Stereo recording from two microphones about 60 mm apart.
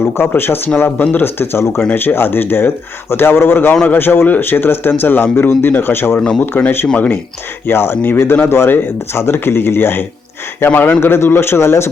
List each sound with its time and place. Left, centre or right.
0.0 s a man's voice: left
6.9 s speech: left
7.7 s a man's voice: left